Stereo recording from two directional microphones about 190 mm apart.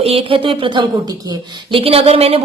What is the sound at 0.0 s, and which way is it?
A woman's voice, 30° right (ahead or behind).